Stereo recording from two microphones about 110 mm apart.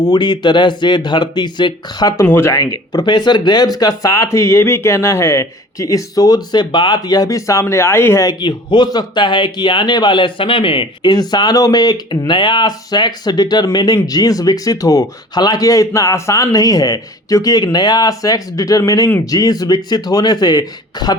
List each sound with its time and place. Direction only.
0.0 s speech: 40° left (ahead or behind)
2.2 s speech: 20° left (ahead or behind)
2.6 s speech: 35° left (ahead or behind)
8.3 s speech: 40° left (ahead or behind)
11.1 s speech: 40° left (ahead or behind)